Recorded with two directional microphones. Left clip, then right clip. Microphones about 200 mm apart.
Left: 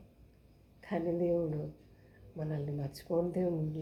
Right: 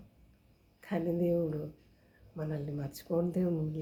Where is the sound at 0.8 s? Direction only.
15° right (ahead or behind).